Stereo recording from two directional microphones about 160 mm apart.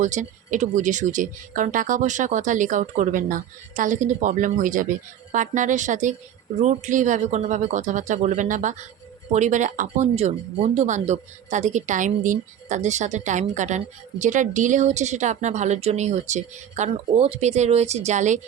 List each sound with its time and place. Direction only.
0.0 s a woman's voice: 50° right (ahead or behind)